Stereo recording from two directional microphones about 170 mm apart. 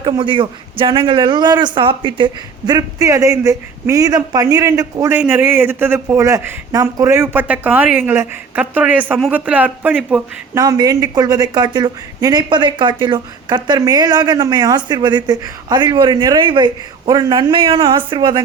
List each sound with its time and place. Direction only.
0.0 s a man's voice: 30° right (ahead or behind); by 10.6 s 10° right (ahead or behind)
10.6 s a man's voice: 20° right (ahead or behind)